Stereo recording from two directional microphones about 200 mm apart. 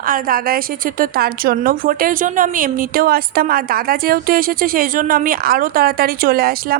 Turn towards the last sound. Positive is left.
turn(degrees=-50)  # may be behind; listen again after turning